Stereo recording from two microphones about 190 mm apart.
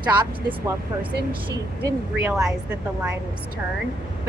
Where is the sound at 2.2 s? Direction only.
15° right (ahead or behind).